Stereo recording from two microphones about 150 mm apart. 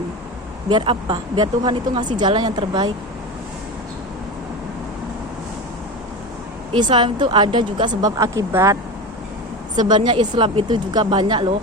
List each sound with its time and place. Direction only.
0.7 s speech: 35° right (ahead or behind)
6.7 s speech: 30° right (ahead or behind)